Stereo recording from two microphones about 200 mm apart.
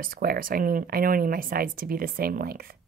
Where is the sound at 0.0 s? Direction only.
45° right (ahead or behind).